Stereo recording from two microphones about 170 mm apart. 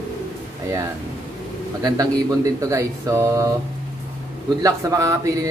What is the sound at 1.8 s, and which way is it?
Speech, 20° right (ahead or behind).